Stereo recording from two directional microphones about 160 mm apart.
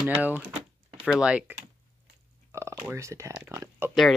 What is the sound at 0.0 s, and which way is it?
Speech, 10° right (ahead or behind).